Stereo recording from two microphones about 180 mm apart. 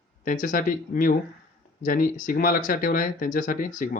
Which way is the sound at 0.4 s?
50° left (ahead or behind).